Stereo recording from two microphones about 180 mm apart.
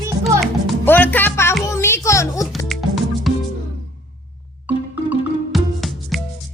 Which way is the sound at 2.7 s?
Centre (ahead or behind).